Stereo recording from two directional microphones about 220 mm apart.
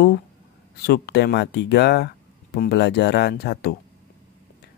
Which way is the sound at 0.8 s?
45° left (ahead or behind).